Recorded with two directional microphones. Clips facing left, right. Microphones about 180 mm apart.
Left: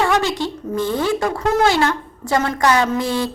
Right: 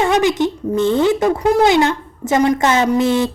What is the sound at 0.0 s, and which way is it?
A woman's voice, 20° right (ahead or behind).